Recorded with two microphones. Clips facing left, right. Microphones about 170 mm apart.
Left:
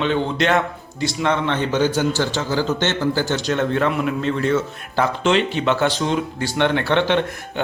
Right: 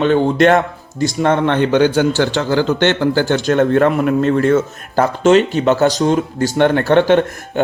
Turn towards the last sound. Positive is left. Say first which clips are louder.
# right 7 dB
turn(degrees=-45)  # may be behind; listen again after turning